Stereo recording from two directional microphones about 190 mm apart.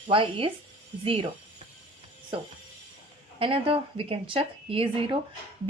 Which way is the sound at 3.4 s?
30° right (ahead or behind).